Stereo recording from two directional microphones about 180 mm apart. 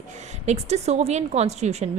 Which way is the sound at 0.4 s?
40° right (ahead or behind).